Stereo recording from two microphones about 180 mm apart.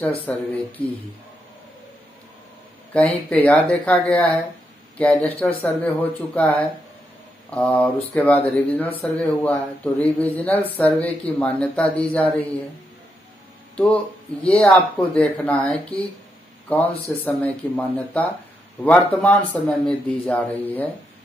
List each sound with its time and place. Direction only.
0.3 s speech: 10° left (ahead or behind)
2.9 s speech: 5° left (ahead or behind)
13.7 s a man's voice: 5° left (ahead or behind)